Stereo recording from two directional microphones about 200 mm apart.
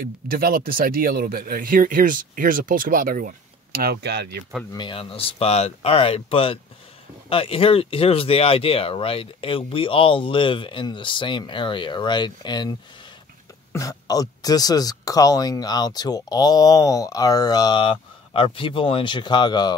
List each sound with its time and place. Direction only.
0.0 s speech: 50° right (ahead or behind)
4.7 s speech: 25° left (ahead or behind)
13.7 s speech: 15° left (ahead or behind)